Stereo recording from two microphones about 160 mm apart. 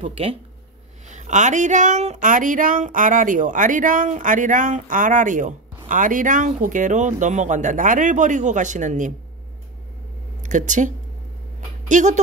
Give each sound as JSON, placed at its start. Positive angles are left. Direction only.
{"t": 0.0, "sound": "speech", "side_deg": -35}
{"t": 1.0, "sound": "speech", "side_deg": -50}
{"t": 10.4, "sound": "speech", "side_deg": -50}
{"t": 11.9, "sound": "speech", "side_deg": -50}